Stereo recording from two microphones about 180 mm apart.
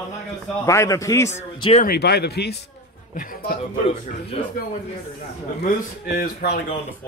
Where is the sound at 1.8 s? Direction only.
60° left (ahead or behind).